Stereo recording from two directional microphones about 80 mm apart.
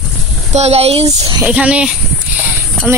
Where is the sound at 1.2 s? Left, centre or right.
Right.